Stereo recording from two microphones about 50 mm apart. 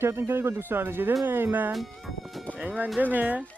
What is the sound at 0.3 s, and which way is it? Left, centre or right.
Speech, right.